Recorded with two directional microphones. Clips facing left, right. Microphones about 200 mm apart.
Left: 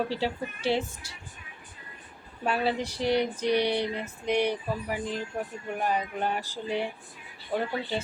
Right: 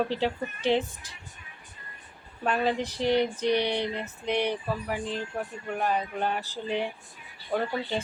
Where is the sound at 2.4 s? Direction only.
10° left (ahead or behind).